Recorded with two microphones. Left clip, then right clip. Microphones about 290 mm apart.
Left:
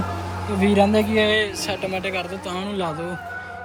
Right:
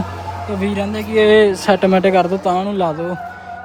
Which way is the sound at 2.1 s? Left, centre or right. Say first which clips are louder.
Right 13 dB; right.